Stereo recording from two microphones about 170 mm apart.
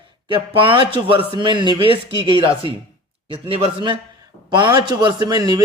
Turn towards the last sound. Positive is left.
turn(degrees=-25)  # may be behind; listen again after turning